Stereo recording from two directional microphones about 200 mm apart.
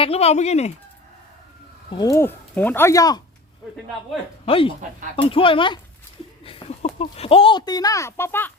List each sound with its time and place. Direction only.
0.0 s speech: 30° left (ahead or behind)
1.9 s speech: 20° left (ahead or behind)
4.4 s speech: 25° left (ahead or behind); by 8.5 s 10° left (ahead or behind)